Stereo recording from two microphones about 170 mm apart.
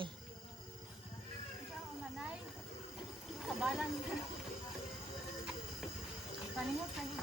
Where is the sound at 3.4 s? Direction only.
5° right (ahead or behind).